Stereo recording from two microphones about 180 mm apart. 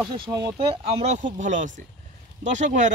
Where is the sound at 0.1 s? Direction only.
25° right (ahead or behind).